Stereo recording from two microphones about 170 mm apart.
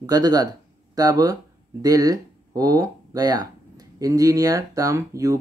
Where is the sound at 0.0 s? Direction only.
20° right (ahead or behind).